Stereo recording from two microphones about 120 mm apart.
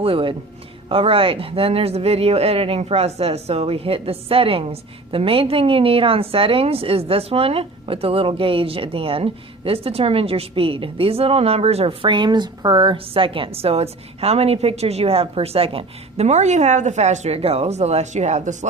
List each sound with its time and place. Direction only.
0.0 s speech: 50° right (ahead or behind)
12.0 s a woman's voice: 40° right (ahead or behind); by 18.5 s 75° right (ahead or behind)